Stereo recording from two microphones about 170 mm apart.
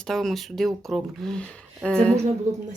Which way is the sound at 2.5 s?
45° right (ahead or behind).